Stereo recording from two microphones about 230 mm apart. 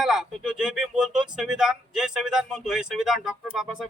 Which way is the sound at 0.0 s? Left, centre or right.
Centre.